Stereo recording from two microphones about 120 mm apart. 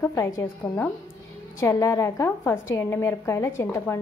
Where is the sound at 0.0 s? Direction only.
25° left (ahead or behind).